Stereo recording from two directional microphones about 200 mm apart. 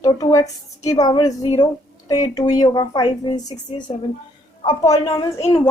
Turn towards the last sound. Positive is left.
turn(degrees=25)  # may be behind; listen again after turning